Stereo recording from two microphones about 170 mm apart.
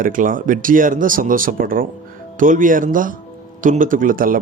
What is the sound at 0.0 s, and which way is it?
A man's voice, 50° right (ahead or behind).